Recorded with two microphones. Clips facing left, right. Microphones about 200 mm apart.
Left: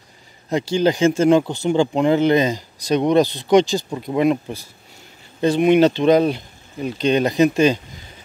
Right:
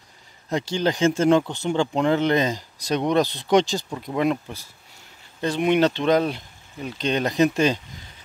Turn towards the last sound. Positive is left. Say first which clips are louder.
# left 4 dB
turn(degrees=5)  # may be behind; listen again after turning